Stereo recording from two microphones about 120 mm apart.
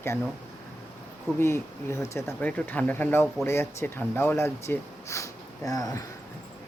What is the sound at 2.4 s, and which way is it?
Speech, 15° left (ahead or behind).